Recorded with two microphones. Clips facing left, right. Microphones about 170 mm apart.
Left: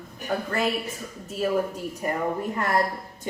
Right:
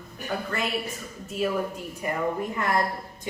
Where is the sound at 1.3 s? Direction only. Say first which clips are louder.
Left 2 dB; 40° left (ahead or behind).